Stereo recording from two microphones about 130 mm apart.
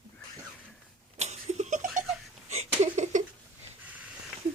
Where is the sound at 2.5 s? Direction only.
60° right (ahead or behind).